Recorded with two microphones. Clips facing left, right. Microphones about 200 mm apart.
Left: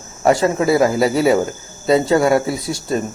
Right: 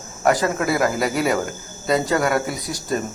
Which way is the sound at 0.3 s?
25° left (ahead or behind).